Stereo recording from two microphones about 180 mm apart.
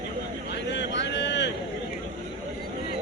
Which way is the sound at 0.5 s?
75° left (ahead or behind).